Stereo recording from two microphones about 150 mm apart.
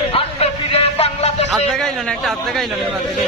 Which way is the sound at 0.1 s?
40° left (ahead or behind).